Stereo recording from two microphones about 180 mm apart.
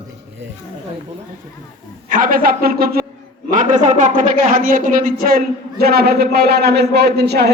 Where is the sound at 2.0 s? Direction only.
50° right (ahead or behind).